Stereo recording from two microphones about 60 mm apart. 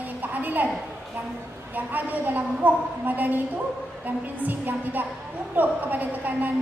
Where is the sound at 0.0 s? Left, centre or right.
Right.